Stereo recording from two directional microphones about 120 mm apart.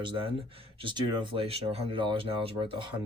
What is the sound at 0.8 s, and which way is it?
Speech, 45° right (ahead or behind).